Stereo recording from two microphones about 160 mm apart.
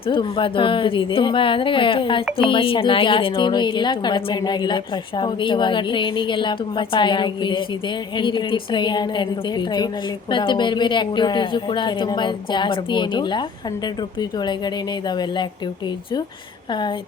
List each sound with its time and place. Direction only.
0.0 s a woman's voice: 30° left (ahead or behind)
16.7 s a woman's voice: 30° left (ahead or behind)